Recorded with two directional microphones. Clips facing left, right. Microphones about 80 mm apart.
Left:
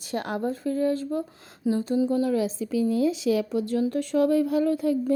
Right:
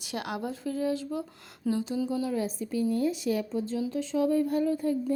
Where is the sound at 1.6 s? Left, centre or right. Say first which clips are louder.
Left 4 dB; centre.